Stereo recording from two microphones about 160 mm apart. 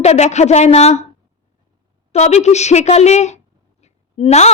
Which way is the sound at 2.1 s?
45° left (ahead or behind).